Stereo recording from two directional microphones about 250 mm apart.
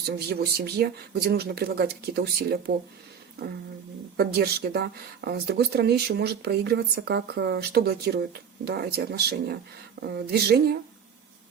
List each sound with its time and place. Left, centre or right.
0.3 s speech: right
4.2 s speech: right